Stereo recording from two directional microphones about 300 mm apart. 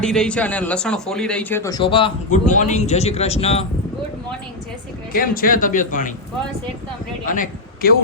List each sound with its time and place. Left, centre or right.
0.0 s speech: centre; by 3.7 s left
5.1 s a man's voice: left
7.3 s a man's voice: left